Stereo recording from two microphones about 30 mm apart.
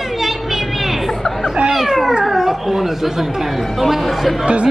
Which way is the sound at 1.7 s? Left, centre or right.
Centre.